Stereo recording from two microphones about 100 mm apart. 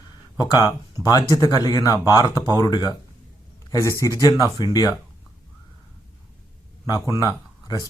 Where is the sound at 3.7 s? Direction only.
30° left (ahead or behind).